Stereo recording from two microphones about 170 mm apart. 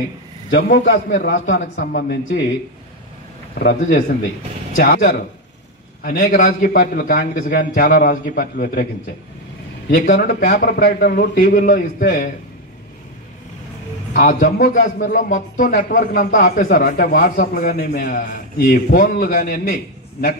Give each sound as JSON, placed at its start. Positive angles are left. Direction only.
{"t": 0.5, "sound": "a man's voice", "side_deg": 65}
{"t": 3.5, "sound": "a man's voice", "side_deg": 80}
{"t": 4.7, "sound": "a man's voice", "side_deg": 55}
{"t": 9.8, "sound": "a man's voice", "side_deg": 55}
{"t": 14.1, "sound": "a man's voice", "side_deg": 55}